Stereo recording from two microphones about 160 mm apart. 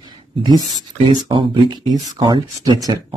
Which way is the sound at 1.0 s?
30° right (ahead or behind).